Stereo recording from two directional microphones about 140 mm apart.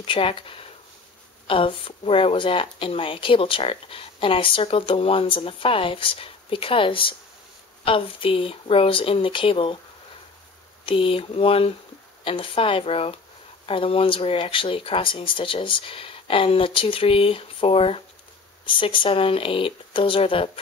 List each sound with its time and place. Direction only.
0.0 s speech: 40° left (ahead or behind)
10.9 s speech: 40° left (ahead or behind)